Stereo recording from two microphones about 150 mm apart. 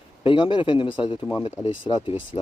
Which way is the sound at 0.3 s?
35° left (ahead or behind).